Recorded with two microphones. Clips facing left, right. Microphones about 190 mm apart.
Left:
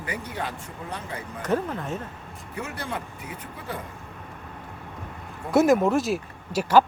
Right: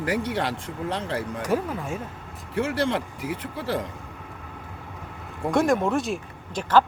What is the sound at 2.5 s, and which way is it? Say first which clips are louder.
Speech: right 9 dB; 90° right.